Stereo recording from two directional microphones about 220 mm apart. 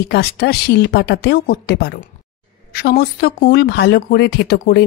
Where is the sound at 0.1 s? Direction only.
50° left (ahead or behind).